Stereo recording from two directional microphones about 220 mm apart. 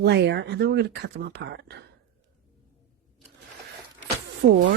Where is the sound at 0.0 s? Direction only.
50° right (ahead or behind).